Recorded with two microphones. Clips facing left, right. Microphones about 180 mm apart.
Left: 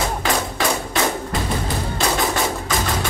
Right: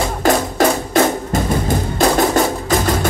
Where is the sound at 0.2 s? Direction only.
45° right (ahead or behind).